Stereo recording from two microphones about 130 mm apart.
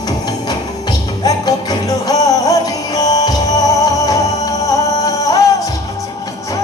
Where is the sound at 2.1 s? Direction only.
30° left (ahead or behind).